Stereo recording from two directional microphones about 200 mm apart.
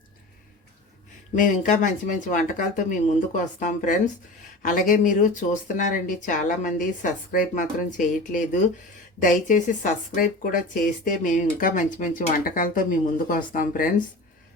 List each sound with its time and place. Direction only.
1.4 s speech: 40° left (ahead or behind)